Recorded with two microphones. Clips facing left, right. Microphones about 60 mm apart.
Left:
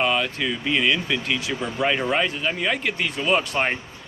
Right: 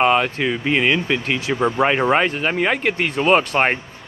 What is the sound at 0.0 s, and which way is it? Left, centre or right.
Speech, right.